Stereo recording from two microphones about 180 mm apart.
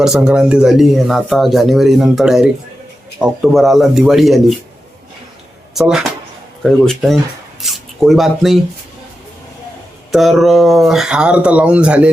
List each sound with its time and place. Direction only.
0.0 s speech: 5° right (ahead or behind)
5.7 s speech: centre (ahead or behind)
10.1 s speech: centre (ahead or behind)